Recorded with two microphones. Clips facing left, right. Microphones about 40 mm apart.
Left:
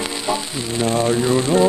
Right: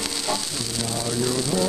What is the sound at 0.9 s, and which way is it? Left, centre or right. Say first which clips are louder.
Speech: left 9 dB; left.